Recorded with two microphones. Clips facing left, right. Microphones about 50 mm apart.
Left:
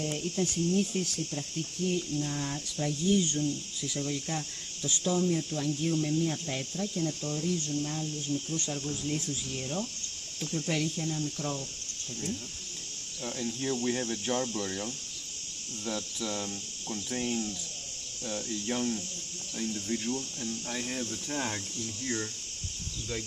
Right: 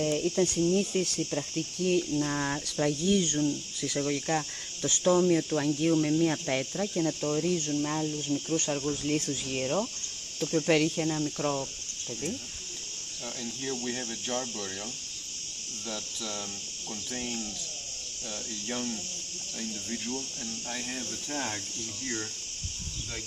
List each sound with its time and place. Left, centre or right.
0.0 s speech: right
0.5 s speech: right
1.9 s speech: right
3.2 s cricket: right
7.2 s speech: right
7.9 s speech: right
10.5 s cricket: right
13.2 s cricket: centre
15.9 s cricket: centre
18.3 s cricket: centre